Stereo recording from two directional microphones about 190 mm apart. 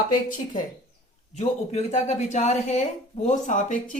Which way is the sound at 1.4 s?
35° left (ahead or behind).